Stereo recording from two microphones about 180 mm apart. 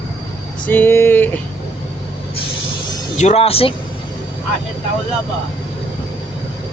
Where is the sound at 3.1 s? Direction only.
35° left (ahead or behind).